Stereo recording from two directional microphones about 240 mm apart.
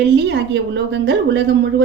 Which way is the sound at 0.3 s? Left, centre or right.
Right.